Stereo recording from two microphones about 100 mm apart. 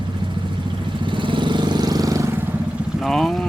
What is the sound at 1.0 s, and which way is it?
Vehicle, 55° right (ahead or behind).